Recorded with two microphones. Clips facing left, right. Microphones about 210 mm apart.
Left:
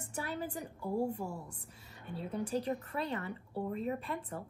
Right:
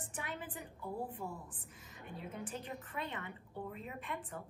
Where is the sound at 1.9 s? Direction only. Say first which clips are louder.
Left 6 dB; 35° left (ahead or behind).